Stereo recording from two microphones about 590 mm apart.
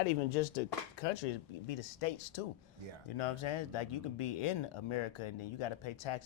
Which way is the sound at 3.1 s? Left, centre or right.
Left.